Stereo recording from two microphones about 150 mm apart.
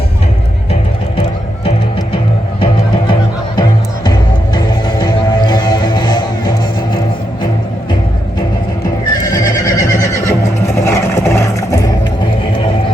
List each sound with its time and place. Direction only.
3.1 s music: 30° left (ahead or behind)
9.3 s neigh: 20° left (ahead or behind)
10.8 s vehicle: 15° left (ahead or behind)